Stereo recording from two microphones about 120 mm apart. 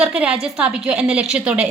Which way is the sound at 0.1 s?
10° right (ahead or behind).